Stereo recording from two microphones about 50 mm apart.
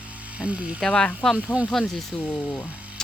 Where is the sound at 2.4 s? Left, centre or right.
Left.